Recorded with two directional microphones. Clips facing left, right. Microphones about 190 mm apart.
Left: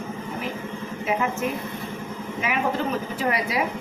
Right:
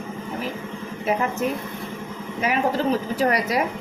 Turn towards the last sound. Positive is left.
turn(degrees=-40)  # may be behind; listen again after turning